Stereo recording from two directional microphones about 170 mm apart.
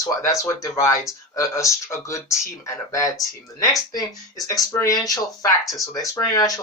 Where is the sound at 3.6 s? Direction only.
20° left (ahead or behind).